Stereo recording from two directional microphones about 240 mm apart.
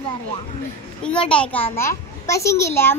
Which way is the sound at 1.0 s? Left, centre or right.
Centre.